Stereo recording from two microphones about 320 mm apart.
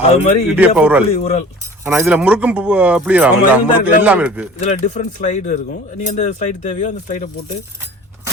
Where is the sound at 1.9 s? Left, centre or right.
Centre.